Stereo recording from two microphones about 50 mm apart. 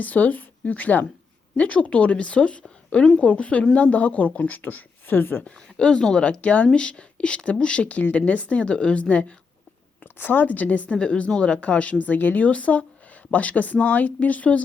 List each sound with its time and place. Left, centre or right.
0.0 s a woman's voice: left
5.7 s speech: centre
6.4 s speech: left
6.7 s a woman's voice: centre
10.0 s speech: left
10.9 s a woman's voice: left